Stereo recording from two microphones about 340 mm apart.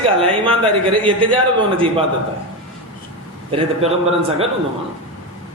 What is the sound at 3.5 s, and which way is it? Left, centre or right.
Speech, centre.